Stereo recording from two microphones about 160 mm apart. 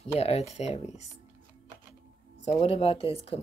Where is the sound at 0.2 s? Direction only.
40° left (ahead or behind).